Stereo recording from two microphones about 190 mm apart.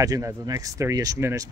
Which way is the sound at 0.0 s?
15° right (ahead or behind).